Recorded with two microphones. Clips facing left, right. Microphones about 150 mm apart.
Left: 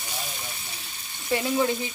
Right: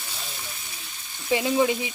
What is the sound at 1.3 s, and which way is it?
Frying, 10° right (ahead or behind).